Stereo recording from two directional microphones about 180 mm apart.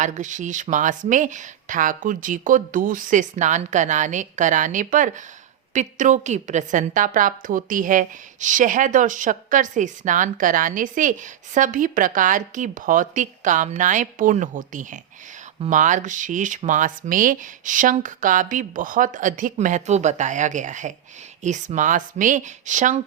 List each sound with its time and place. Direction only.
0.0 s a woman's voice: 45° right (ahead or behind)